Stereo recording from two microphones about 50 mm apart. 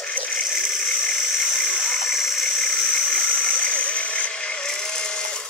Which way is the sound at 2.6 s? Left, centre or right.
Centre.